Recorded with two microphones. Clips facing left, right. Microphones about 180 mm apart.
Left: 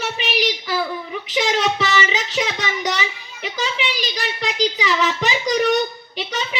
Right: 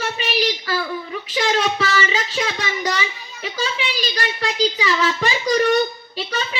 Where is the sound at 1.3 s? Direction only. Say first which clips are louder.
Even; 20° left (ahead or behind).